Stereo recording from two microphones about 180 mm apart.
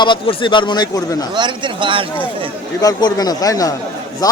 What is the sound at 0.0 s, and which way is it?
Speech, 25° left (ahead or behind).